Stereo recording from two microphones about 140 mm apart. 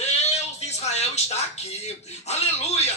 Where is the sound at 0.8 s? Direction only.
50° left (ahead or behind).